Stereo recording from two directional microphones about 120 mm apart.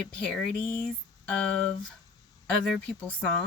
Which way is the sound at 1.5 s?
10° left (ahead or behind).